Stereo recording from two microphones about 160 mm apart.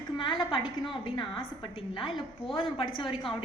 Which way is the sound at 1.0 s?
30° left (ahead or behind).